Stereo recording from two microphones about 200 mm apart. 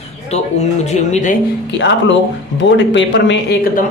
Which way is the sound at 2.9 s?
65° left (ahead or behind).